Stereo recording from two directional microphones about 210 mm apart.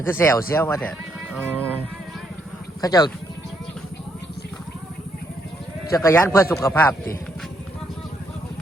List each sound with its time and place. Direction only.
0.1 s a man's voice: 10° left (ahead or behind)
1.3 s speech: 10° right (ahead or behind)
2.8 s a man's voice: 20° left (ahead or behind)
5.9 s a man's voice: 15° left (ahead or behind)